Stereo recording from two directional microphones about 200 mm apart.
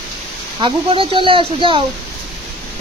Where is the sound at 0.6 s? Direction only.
25° right (ahead or behind).